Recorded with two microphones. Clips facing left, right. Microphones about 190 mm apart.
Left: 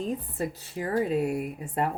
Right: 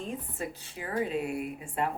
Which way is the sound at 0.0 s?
35° left (ahead or behind).